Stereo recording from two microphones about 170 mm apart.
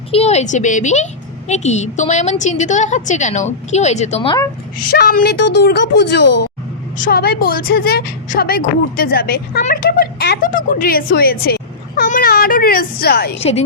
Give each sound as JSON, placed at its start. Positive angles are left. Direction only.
{"t": 0.1, "sound": "a woman's voice", "side_deg": 40}
{"t": 4.9, "sound": "speech", "side_deg": 60}
{"t": 6.9, "sound": "a woman's voice", "side_deg": 55}